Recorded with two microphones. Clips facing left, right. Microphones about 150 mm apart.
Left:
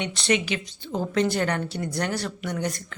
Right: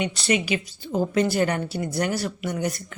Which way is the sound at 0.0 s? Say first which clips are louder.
Right 1 dB; 5° right (ahead or behind).